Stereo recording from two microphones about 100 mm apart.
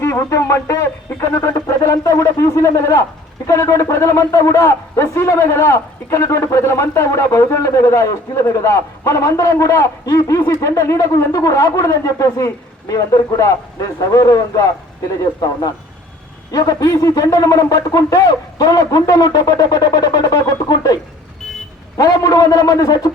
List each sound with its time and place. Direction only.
0.0 s a man's voice: 25° left (ahead or behind)